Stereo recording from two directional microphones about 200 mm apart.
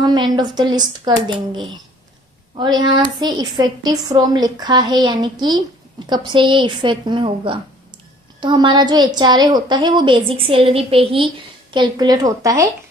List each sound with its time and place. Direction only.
0.0 s a woman's voice: 20° right (ahead or behind)